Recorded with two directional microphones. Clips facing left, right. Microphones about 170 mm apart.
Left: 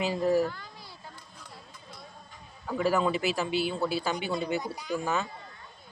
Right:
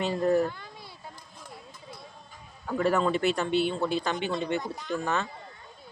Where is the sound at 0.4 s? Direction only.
20° right (ahead or behind).